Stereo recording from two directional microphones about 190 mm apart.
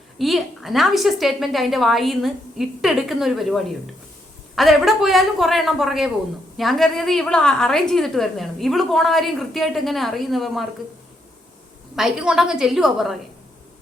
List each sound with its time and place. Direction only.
0.2 s a woman's voice: centre (ahead or behind)
11.9 s a woman's voice: 5° right (ahead or behind)